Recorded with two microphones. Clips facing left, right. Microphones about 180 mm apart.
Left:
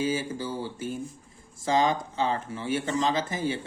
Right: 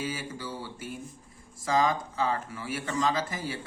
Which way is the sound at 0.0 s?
25° left (ahead or behind).